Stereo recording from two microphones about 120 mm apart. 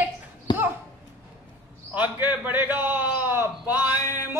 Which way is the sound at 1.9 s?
15° right (ahead or behind).